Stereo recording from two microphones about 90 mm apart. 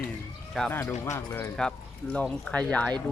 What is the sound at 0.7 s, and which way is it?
Speech, 25° left (ahead or behind).